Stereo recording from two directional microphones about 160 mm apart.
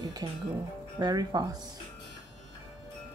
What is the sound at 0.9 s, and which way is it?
Speech, 25° right (ahead or behind).